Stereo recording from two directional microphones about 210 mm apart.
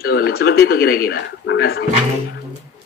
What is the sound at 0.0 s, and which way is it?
Speech, 50° left (ahead or behind).